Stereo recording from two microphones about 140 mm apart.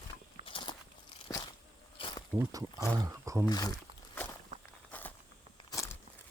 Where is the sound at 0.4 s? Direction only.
40° left (ahead or behind).